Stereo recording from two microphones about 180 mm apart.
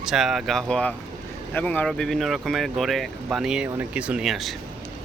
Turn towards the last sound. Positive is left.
turn(degrees=0)  # may be behind; listen again after turning